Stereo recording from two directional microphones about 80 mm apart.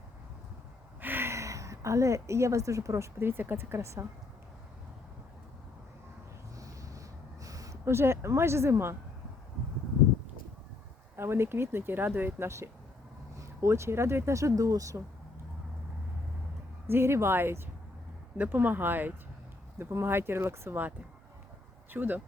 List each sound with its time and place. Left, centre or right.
1.0 s a woman's voice: right
6.6 s a sound: right
7.4 s speech: right
11.2 s speech: right
16.8 s speech: right
21.9 s speech: right